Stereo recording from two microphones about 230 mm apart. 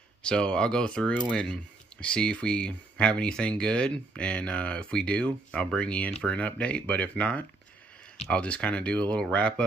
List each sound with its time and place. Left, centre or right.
0.2 s speech: centre